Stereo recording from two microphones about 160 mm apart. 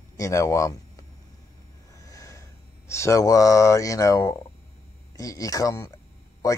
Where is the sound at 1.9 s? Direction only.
20° left (ahead or behind).